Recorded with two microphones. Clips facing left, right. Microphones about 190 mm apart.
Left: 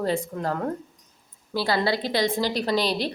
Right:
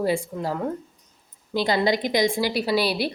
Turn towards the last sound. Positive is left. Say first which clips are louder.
# right 1 dB
turn(degrees=-10)  # may be behind; listen again after turning